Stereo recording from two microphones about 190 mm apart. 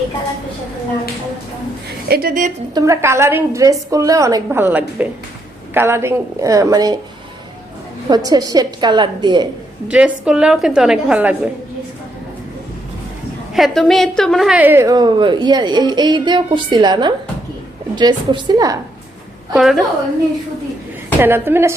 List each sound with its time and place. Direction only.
2.0 s a woman's voice: 50° right (ahead or behind)
2.7 s a woman's voice: 15° right (ahead or behind)
8.1 s a woman's voice: 20° right (ahead or behind)
9.9 s a woman's voice: 5° right (ahead or behind)
13.5 s a woman's voice: centre (ahead or behind); by 18.8 s 20° right (ahead or behind)
19.5 s a woman's voice: centre (ahead or behind)
21.2 s a woman's voice: 10° right (ahead or behind)